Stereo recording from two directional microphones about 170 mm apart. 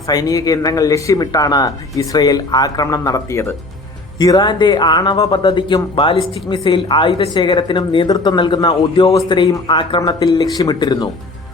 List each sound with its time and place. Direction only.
0.1 s speech: 20° left (ahead or behind)